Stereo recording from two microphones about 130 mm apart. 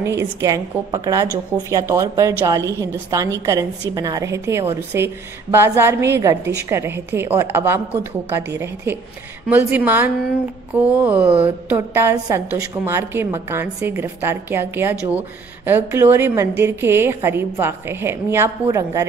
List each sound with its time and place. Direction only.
0.0 s a woman's voice: 25° right (ahead or behind)